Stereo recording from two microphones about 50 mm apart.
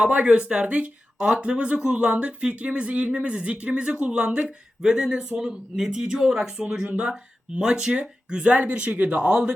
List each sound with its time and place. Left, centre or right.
0.0 s speech: right
7.5 s speech: centre